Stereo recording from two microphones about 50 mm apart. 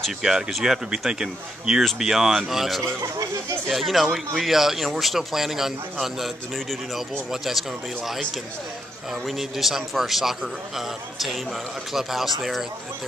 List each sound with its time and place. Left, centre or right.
0.2 s speech: centre
0.5 s a man's voice: centre
2.8 s speech: right
3.6 s a man's voice: centre
9.2 s a man's voice: centre